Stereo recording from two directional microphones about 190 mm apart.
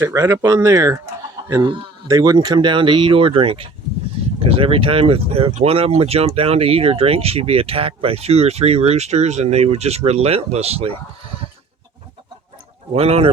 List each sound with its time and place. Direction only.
0.0 s speech: 15° right (ahead or behind); by 10.9 s 30° right (ahead or behind)
12.9 s speech: 30° right (ahead or behind)